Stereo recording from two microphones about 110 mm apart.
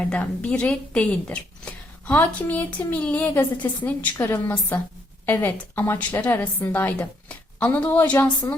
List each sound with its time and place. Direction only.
0.0 s a woman's voice: 10° left (ahead or behind)